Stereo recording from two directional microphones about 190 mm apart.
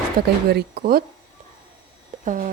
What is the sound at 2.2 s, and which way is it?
Speech, 45° right (ahead or behind).